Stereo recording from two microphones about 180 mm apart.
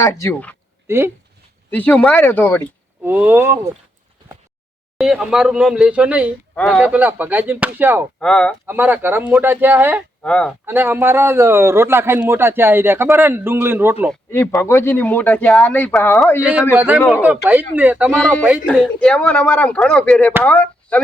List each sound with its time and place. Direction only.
0.0 s speech: 15° left (ahead or behind)
0.9 s speech: 15° right (ahead or behind)
1.7 s speech: 10° left (ahead or behind)
3.0 s a man's voice: 10° right (ahead or behind)
4.9 s speech: 5° right (ahead or behind)
6.6 s speech: 5° left (ahead or behind)
6.8 s a man's voice: 10° right (ahead or behind)
8.2 s speech: 5° left (ahead or behind)
8.6 s a man's voice: 10° right (ahead or behind)
10.2 s speech: 5° left (ahead or behind)
10.7 s a man's voice: 10° right (ahead or behind)
14.3 s speech: 15° left (ahead or behind)
16.4 s a man's voice: 10° right (ahead or behind)
18.7 s speech: 5° left (ahead or behind)